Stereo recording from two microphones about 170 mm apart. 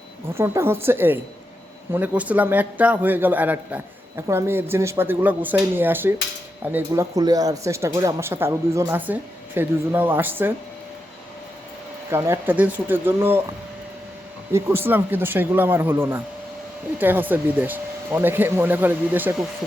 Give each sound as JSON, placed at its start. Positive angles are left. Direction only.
{"t": 0.3, "sound": "speech", "side_deg": -15}
{"t": 12.1, "sound": "speech", "side_deg": -15}
{"t": 14.5, "sound": "speech", "side_deg": -15}